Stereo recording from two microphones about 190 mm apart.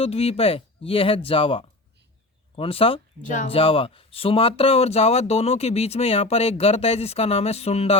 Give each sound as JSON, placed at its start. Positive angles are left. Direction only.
{"t": 0.0, "sound": "speech", "side_deg": 30}